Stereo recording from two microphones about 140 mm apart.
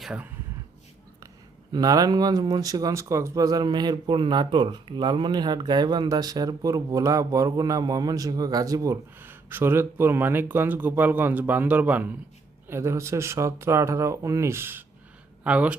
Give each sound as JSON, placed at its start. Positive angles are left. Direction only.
{"t": 0.0, "sound": "speech", "side_deg": -5}
{"t": 1.7, "sound": "speech", "side_deg": -25}